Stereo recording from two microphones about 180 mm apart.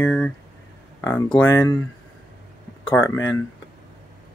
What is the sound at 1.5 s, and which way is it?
Speech, 15° left (ahead or behind).